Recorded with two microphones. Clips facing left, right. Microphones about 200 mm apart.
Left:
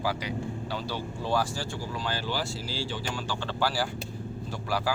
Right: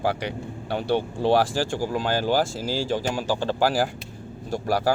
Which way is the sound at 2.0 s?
45° right (ahead or behind).